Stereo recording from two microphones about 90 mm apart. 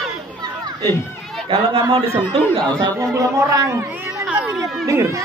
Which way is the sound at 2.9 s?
35° right (ahead or behind).